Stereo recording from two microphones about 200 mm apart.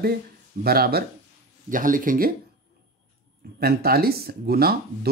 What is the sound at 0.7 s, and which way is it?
Speech, 50° right (ahead or behind).